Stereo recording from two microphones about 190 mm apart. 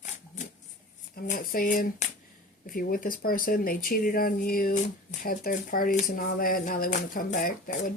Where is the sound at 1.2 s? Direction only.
45° left (ahead or behind).